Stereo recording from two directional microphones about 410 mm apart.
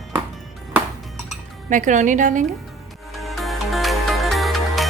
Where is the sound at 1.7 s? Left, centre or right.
Centre.